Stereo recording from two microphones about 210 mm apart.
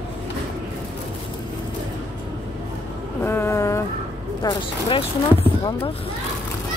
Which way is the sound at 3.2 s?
10° left (ahead or behind).